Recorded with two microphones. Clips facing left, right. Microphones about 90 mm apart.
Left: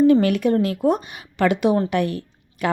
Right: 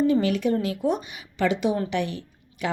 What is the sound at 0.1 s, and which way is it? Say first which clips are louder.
A woman's voice: left 5 dB; 60° left (ahead or behind).